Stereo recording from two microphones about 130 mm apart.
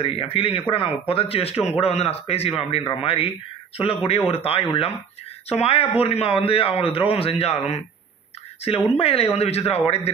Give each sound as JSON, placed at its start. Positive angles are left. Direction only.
{"t": 0.0, "sound": "a man's voice", "side_deg": 45}
{"t": 4.3, "sound": "a man's voice", "side_deg": 50}